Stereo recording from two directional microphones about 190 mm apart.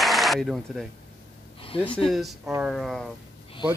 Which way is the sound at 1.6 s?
30° left (ahead or behind).